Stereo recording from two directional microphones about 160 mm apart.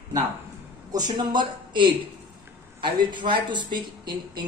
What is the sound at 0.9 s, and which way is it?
Speech, 30° right (ahead or behind).